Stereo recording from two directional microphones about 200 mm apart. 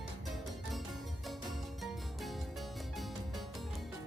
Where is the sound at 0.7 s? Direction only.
Centre (ahead or behind).